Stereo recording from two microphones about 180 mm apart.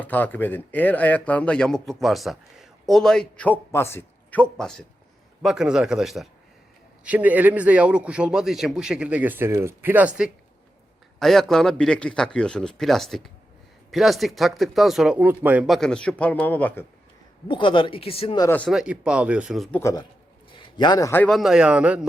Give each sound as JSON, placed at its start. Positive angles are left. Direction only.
{"t": 0.0, "sound": "a man's voice", "side_deg": 10}
{"t": 17.5, "sound": "speech", "side_deg": 25}
{"t": 18.4, "sound": "speech", "side_deg": 10}
{"t": 18.7, "sound": "speech", "side_deg": -5}
{"t": 19.8, "sound": "speech", "side_deg": 20}